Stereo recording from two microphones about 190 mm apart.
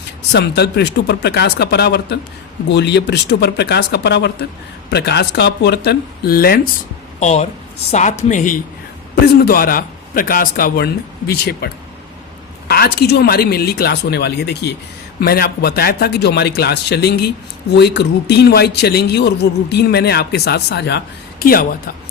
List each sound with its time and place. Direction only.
0.3 s a man's voice: 60° left (ahead or behind)
7.2 s a woman's voice: 35° left (ahead or behind)
9.2 s a man's voice: 55° left (ahead or behind)